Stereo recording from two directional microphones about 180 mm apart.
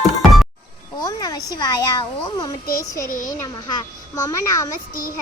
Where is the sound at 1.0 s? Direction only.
20° left (ahead or behind).